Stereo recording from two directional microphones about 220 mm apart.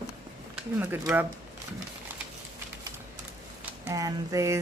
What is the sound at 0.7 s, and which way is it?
Speech, 10° right (ahead or behind).